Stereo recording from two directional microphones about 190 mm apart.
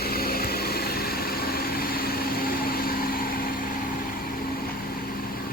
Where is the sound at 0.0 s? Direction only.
55° left (ahead or behind).